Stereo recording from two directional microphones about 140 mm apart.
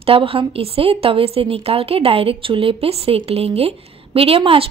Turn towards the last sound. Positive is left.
turn(degrees=-40)  # may be behind; listen again after turning